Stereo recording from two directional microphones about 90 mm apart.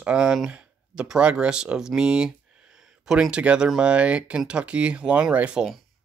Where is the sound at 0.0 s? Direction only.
10° right (ahead or behind).